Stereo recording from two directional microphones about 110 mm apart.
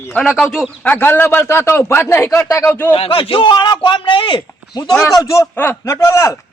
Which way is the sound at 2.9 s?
50° left (ahead or behind).